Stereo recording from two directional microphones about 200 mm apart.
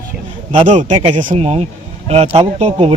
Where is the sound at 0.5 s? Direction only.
35° right (ahead or behind).